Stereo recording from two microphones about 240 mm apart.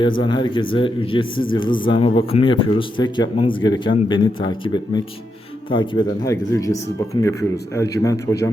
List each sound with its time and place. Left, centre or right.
0.2 s speech: centre